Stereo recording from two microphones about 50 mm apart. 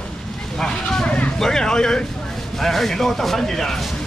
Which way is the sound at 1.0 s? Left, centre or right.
Left.